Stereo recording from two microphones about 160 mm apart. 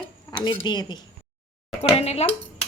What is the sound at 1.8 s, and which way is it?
Speech, 40° left (ahead or behind).